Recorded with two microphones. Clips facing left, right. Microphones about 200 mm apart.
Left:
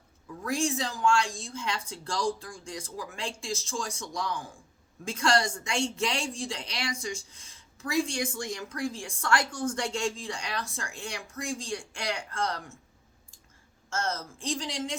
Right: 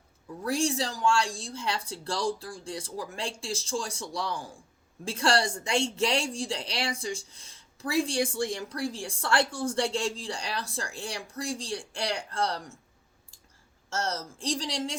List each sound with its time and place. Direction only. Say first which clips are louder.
0.4 s a woman's voice: right 1 dB; 35° right (ahead or behind)
13.9 s a woman's voice: even; 35° right (ahead or behind)